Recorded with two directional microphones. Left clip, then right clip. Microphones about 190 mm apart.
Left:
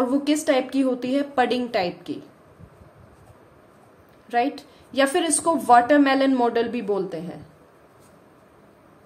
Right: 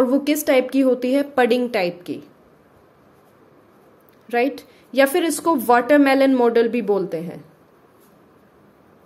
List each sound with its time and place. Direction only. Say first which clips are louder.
0.0 s a woman's voice: right 3 dB; 30° right (ahead or behind)
4.3 s a woman's voice: right 2 dB; 30° right (ahead or behind)